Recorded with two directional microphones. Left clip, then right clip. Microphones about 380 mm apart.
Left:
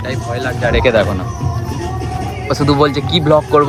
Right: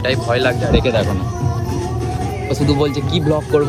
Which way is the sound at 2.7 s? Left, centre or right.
Centre.